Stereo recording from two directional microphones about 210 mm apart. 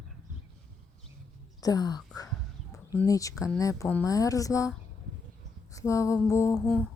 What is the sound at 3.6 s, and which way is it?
Speech, 15° left (ahead or behind).